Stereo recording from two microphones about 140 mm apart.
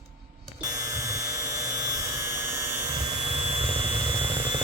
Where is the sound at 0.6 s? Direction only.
25° right (ahead or behind).